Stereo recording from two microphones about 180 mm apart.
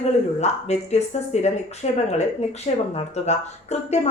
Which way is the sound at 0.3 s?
40° left (ahead or behind).